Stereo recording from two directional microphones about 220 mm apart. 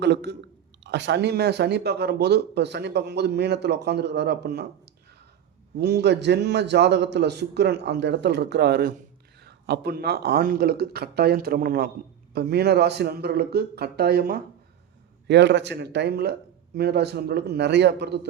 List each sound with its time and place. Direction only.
0.0 s speech: 50° right (ahead or behind)
5.7 s speech: 50° right (ahead or behind)